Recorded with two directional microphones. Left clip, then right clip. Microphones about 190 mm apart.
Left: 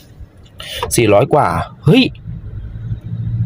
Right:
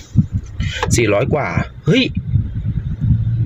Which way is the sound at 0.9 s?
15° left (ahead or behind).